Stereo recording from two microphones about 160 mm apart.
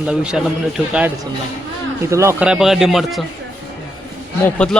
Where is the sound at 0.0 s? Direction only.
5° right (ahead or behind).